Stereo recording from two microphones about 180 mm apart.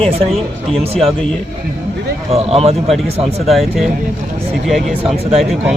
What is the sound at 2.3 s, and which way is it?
Speech, 35° right (ahead or behind).